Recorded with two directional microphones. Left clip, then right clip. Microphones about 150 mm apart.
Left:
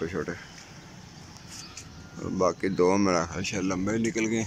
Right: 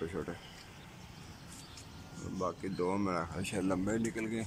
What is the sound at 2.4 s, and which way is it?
Speech, 20° left (ahead or behind).